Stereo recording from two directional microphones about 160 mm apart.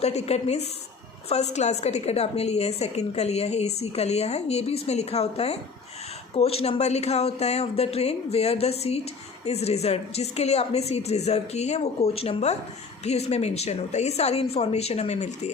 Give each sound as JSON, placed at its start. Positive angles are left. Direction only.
{"t": 0.0, "sound": "a woman's voice", "side_deg": 40}